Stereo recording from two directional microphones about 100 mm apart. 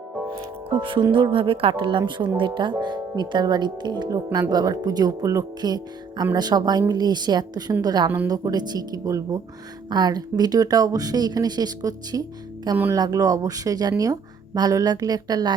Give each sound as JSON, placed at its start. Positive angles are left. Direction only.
{"t": 0.3, "sound": "music", "side_deg": -55}
{"t": 1.1, "sound": "speech", "side_deg": -60}